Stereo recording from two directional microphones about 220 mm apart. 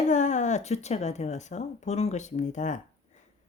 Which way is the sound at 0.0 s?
35° left (ahead or behind).